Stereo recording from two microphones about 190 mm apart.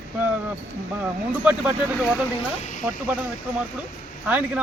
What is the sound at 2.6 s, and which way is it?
Speech, 40° left (ahead or behind).